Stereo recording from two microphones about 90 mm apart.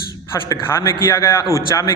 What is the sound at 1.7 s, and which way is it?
Speech, 40° left (ahead or behind).